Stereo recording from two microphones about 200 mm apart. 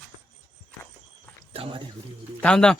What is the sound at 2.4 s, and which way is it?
Speech, 5° left (ahead or behind).